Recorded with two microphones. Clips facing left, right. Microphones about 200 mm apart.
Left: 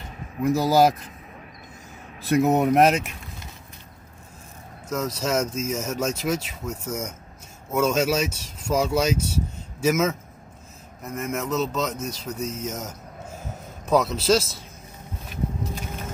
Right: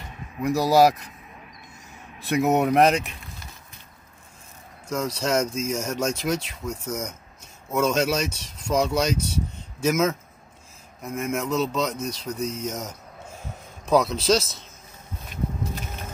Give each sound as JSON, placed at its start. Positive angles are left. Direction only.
{"t": 0.4, "sound": "speech", "side_deg": 0}
{"t": 2.4, "sound": "speech", "side_deg": 0}
{"t": 4.8, "sound": "speech", "side_deg": 5}